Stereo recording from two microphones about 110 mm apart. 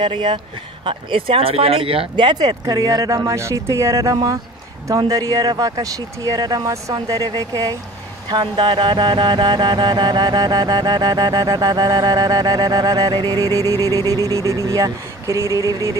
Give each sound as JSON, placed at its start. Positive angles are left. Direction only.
{"t": 0.0, "sound": "speech", "side_deg": -45}
{"t": 0.8, "sound": "music", "side_deg": -55}